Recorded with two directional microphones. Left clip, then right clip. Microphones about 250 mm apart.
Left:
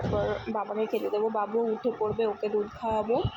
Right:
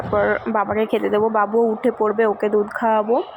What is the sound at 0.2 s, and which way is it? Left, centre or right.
Speech, right.